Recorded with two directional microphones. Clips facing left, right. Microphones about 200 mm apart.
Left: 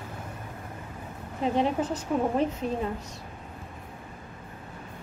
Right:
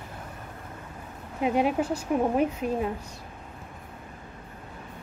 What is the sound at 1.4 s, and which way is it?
Speech, 10° right (ahead or behind).